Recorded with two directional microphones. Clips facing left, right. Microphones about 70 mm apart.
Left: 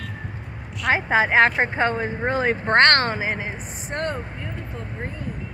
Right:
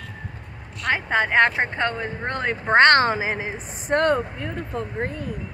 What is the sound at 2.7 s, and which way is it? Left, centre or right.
Speech, centre.